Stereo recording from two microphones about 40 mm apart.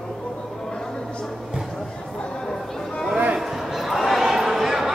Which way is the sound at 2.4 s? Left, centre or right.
Centre.